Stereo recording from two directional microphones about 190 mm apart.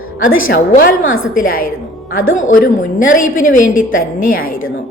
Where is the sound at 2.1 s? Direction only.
90° left.